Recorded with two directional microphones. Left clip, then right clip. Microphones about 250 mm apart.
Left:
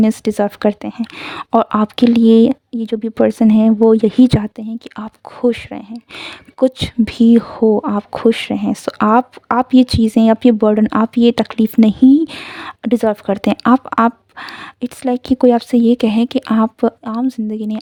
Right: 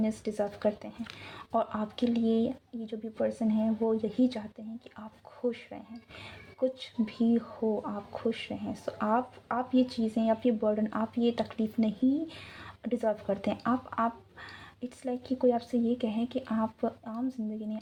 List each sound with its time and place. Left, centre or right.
0.0 s speech: left